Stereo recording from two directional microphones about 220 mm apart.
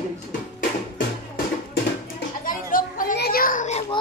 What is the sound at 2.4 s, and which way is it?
Children playing, 40° left (ahead or behind).